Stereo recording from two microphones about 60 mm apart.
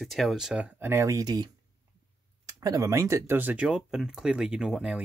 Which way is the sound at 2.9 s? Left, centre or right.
Right.